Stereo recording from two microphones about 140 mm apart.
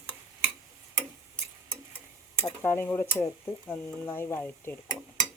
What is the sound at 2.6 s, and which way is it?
Speech, 15° left (ahead or behind).